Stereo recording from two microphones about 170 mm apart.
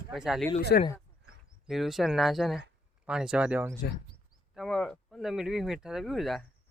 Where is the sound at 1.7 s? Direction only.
Centre (ahead or behind).